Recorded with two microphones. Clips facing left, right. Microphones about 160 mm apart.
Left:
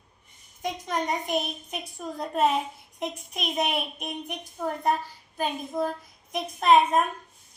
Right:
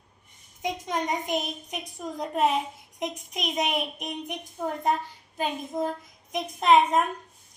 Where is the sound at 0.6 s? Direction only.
20° right (ahead or behind).